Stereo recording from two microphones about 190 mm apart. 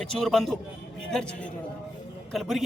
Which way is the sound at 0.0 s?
Centre (ahead or behind).